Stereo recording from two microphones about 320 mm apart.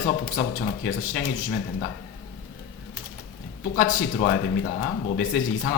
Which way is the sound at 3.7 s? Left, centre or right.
Left.